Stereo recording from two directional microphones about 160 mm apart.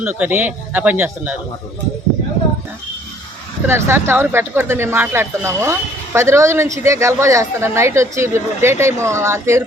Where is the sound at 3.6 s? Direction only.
15° right (ahead or behind).